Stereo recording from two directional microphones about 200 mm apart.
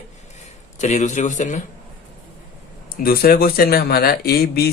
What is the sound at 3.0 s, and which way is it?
Speech, 45° left (ahead or behind).